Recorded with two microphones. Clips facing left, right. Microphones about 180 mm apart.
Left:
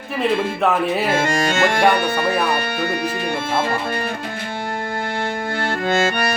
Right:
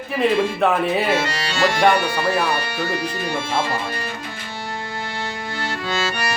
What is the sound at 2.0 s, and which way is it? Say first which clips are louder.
Speech: left 1 dB; 55° left (ahead or behind).